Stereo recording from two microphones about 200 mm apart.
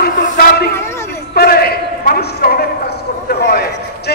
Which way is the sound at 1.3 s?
50° left (ahead or behind).